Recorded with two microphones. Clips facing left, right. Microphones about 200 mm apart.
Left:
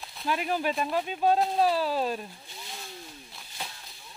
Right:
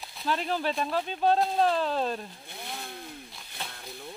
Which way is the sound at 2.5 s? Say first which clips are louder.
Right 8 dB; 60° right (ahead or behind).